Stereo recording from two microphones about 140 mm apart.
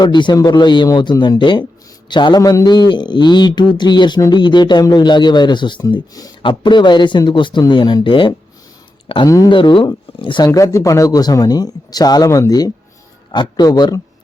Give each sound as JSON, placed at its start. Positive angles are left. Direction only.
{"t": 0.0, "sound": "a man's voice", "side_deg": 35}